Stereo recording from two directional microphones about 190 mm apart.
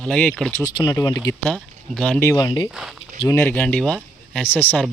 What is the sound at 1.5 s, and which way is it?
Speech, centre (ahead or behind).